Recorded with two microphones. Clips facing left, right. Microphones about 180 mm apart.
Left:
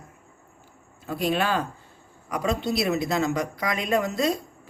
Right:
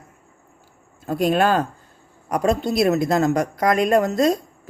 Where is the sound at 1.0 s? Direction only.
45° right (ahead or behind).